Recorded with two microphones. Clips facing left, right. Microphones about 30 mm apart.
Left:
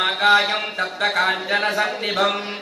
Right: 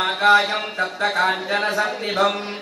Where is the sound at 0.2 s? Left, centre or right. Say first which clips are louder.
Right 2 dB; left.